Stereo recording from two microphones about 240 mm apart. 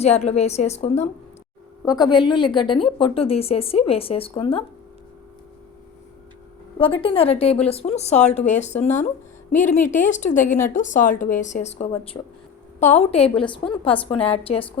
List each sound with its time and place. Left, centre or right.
0.0 s a woman's voice: left
1.8 s a woman's voice: centre
6.7 s a woman's voice: left